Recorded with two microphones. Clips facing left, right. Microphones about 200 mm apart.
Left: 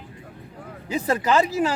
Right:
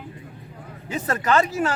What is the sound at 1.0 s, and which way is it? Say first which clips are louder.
Speech: even; 10° left (ahead or behind).